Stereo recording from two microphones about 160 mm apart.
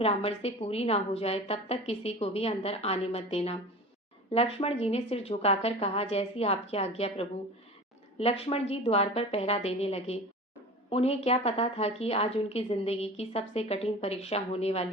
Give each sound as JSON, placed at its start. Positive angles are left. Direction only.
{"t": 0.0, "sound": "a woman's voice", "side_deg": 35}